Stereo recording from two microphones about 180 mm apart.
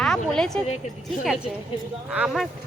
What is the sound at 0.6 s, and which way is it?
Speech, 35° left (ahead or behind).